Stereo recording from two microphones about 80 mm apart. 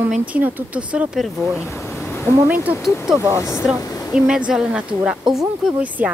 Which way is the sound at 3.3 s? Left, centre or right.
Left.